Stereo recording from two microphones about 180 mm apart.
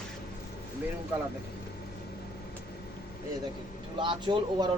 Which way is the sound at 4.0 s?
25° right (ahead or behind).